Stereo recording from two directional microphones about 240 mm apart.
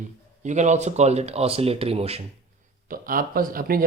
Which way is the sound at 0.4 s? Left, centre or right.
Right.